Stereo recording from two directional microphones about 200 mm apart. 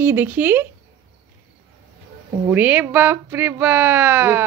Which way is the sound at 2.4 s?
10° right (ahead or behind).